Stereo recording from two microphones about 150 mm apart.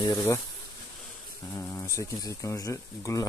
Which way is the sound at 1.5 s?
15° left (ahead or behind).